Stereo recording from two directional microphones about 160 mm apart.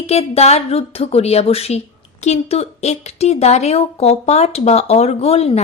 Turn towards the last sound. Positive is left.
turn(degrees=40)  # may be behind; listen again after turning